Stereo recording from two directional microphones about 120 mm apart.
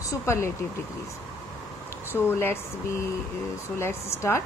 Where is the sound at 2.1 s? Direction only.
20° left (ahead or behind).